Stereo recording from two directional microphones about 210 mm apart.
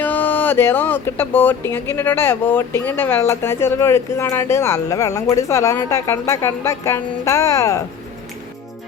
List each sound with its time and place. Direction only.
0.0 s speech: 10° left (ahead or behind)